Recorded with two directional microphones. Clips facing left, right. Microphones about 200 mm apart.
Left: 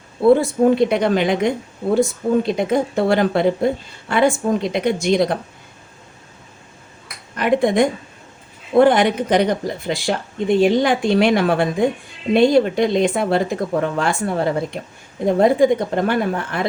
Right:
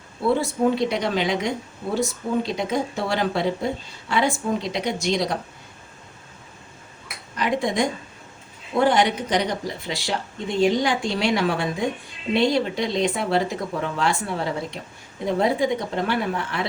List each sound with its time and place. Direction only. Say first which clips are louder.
0.4 s a woman's voice: left 6 dB; 55° left (ahead or behind)
7.3 s a woman's voice: left 7 dB; 55° left (ahead or behind)